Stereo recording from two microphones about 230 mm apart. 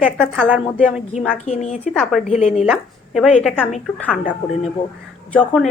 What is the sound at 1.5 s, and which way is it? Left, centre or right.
Speech, left.